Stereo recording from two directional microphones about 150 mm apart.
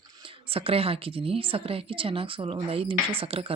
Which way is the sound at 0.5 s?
40° right (ahead or behind).